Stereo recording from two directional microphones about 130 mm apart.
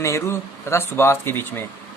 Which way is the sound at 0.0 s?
20° left (ahead or behind).